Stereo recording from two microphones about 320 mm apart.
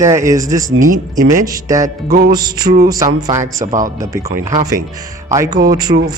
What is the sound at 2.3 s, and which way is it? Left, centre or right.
Speech, centre.